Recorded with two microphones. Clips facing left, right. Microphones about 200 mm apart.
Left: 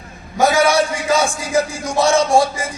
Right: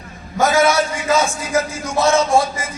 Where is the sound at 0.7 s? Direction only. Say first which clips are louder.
Left 2 dB; 30° left (ahead or behind).